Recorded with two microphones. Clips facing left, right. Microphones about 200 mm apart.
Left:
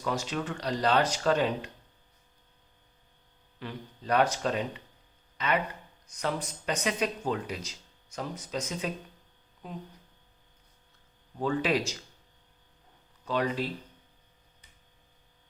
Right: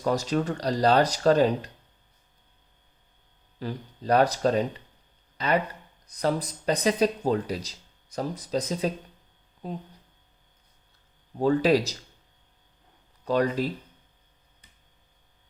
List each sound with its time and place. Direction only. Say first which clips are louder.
0.0 s speech: right 7 dB; 40° right (ahead or behind)
3.6 s speech: right 6 dB; 35° right (ahead or behind)
11.3 s speech: right 7 dB; 35° right (ahead or behind)
13.2 s speech: right 5 dB; 40° right (ahead or behind)